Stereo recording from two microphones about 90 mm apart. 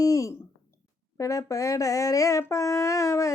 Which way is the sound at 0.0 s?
35° left (ahead or behind).